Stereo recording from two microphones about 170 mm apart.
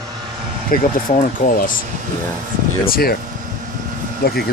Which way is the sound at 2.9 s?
65° left (ahead or behind).